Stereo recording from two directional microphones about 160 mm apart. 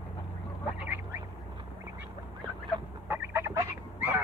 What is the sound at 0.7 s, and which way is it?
Duck, 10° right (ahead or behind).